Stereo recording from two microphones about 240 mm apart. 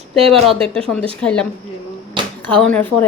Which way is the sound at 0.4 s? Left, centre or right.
Centre.